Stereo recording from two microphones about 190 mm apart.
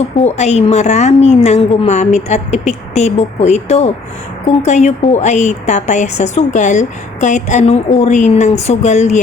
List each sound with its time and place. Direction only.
0.2 s a woman's voice: 35° left (ahead or behind)